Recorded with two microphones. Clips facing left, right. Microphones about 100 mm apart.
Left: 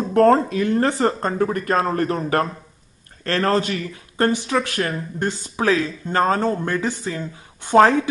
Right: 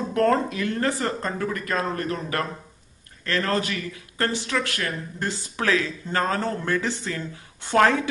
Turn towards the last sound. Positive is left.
turn(degrees=25)  # may be behind; listen again after turning